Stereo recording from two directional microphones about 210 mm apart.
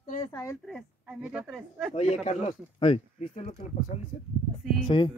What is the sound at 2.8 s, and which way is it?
Speech, 30° left (ahead or behind).